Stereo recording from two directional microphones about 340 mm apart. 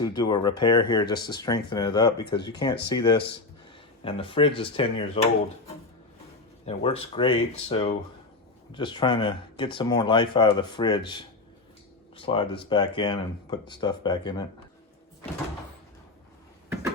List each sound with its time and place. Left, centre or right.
0.0 s speech: centre
6.7 s speech: centre